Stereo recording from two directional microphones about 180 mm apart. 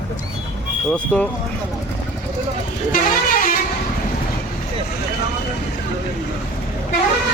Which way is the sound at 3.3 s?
50° left (ahead or behind).